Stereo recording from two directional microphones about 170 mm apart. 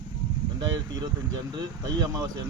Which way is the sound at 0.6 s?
25° right (ahead or behind).